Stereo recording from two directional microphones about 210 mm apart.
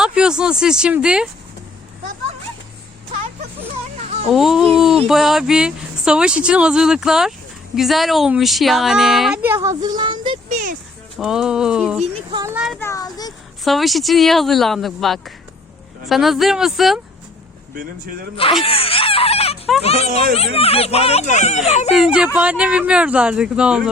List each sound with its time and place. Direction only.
0.0 s speech: 5° right (ahead or behind)
4.0 s a sound: 30° right (ahead or behind)
4.3 s speech: centre (ahead or behind)
9.6 s speech: 20° right (ahead or behind)
10.5 s a sound: 40° right (ahead or behind)
11.2 s speech: centre (ahead or behind)
12.3 s speech: 20° right (ahead or behind)
12.5 s speech: centre (ahead or behind)
12.8 s speech: 15° left (ahead or behind)
13.7 s speech: centre (ahead or behind)
18.6 s a sound: 25° left (ahead or behind)
19.8 s speech: 30° left (ahead or behind)
21.9 s speech: 5° right (ahead or behind)